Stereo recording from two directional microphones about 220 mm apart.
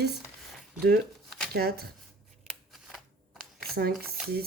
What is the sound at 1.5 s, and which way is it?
Speech, 45° right (ahead or behind).